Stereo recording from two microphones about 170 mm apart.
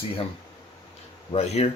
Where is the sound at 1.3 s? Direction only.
40° left (ahead or behind).